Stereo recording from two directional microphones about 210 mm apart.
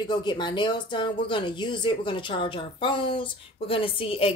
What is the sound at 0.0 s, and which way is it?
Speech, 20° left (ahead or behind).